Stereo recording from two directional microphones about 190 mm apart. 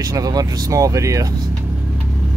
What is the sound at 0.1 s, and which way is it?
Speech, 20° right (ahead or behind).